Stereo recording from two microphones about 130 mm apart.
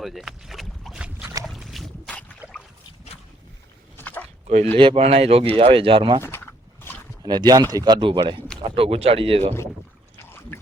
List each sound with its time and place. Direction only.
0.0 s boat: centre (ahead or behind)
2.4 s boat: 10° right (ahead or behind)
3.9 s a sound: 15° left (ahead or behind)
4.4 s speech: 60° right (ahead or behind)
4.8 s speech: 45° right (ahead or behind)
7.2 s speech: 35° right (ahead or behind); by 9.6 s 50° right (ahead or behind)